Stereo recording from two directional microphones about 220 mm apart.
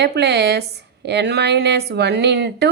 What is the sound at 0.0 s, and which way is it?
A woman's voice, 50° right (ahead or behind).